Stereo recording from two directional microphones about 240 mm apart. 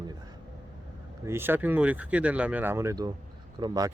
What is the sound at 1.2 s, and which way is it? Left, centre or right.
Speech, centre.